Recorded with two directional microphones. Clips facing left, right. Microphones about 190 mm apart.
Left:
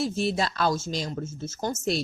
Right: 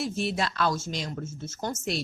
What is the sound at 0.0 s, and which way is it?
A woman's voice, 35° left (ahead or behind).